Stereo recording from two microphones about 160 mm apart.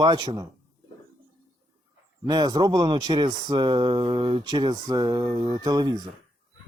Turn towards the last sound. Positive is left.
turn(degrees=-25)  # may be behind; listen again after turning